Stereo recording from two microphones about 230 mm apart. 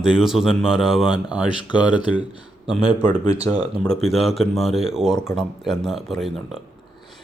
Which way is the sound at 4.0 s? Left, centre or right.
Centre.